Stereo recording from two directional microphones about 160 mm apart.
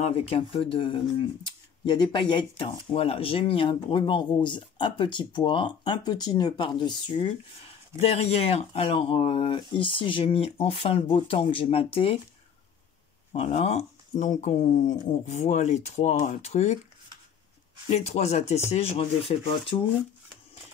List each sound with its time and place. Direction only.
0.0 s speech: 40° left (ahead or behind)
8.0 s speech: 40° left (ahead or behind)
13.3 s speech: 40° left (ahead or behind)
17.8 s speech: 45° left (ahead or behind)